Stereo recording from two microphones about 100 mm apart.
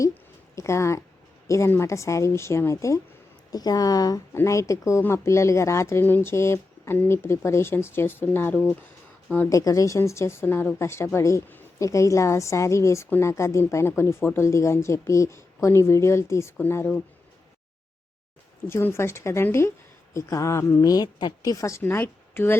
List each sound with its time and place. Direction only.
0.1 s a woman's voice: 30° left (ahead or behind)
3.5 s a woman's voice: 40° left (ahead or behind); by 8.6 s 20° left (ahead or behind)
9.5 s a woman's voice: 35° left (ahead or behind)
18.7 s a woman's voice: 25° left (ahead or behind)